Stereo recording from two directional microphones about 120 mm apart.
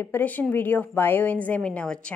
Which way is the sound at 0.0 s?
15° left (ahead or behind).